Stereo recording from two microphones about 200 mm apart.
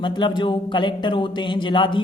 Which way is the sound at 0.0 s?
25° left (ahead or behind).